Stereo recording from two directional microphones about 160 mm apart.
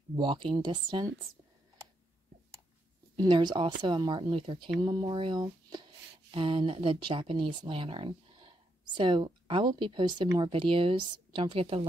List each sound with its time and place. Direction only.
0.1 s speech: 30° right (ahead or behind)
3.2 s a woman's voice: 30° right (ahead or behind)